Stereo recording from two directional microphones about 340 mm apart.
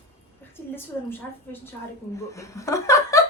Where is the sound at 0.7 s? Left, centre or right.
Centre.